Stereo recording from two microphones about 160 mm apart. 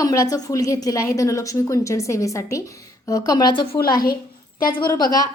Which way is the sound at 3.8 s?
70° left (ahead or behind).